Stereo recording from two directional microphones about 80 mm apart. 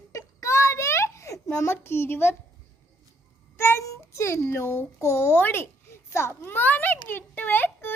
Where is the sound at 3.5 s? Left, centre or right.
Left.